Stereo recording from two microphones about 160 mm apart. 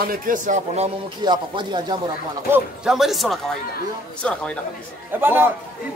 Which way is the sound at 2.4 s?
15° right (ahead or behind).